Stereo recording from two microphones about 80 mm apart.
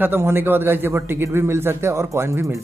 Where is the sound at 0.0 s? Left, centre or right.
Right.